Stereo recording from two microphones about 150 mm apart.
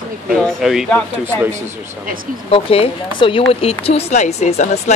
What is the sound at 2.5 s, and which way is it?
A woman's voice, 40° left (ahead or behind).